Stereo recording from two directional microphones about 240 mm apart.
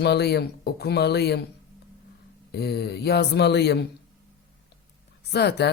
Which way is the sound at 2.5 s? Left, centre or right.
Left.